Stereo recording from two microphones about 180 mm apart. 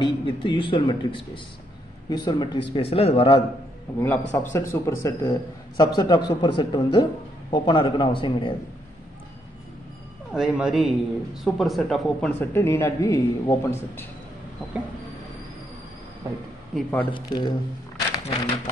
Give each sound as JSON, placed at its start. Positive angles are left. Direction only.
{"t": 0.0, "sound": "speech", "side_deg": 25}
{"t": 4.0, "sound": "a man's voice", "side_deg": 10}
{"t": 10.3, "sound": "a man's voice", "side_deg": 0}
{"t": 16.7, "sound": "a man's voice", "side_deg": 10}
{"t": 17.1, "sound": "speech", "side_deg": 25}